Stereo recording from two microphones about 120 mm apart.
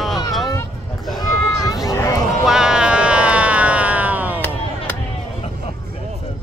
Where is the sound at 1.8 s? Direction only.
30° left (ahead or behind).